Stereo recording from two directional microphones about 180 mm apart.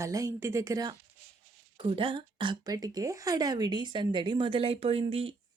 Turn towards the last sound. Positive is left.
turn(degrees=-30)  # may be behind; listen again after turning